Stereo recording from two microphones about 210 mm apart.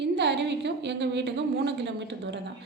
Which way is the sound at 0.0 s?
55° right (ahead or behind).